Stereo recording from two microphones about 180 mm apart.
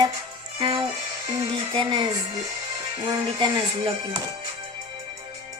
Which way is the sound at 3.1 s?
20° right (ahead or behind).